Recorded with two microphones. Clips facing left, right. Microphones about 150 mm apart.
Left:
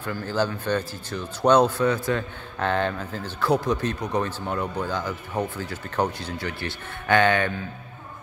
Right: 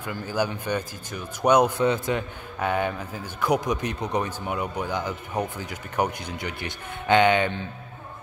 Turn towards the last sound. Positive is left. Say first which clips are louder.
# right 1 dB
turn(degrees=-20)  # may be behind; listen again after turning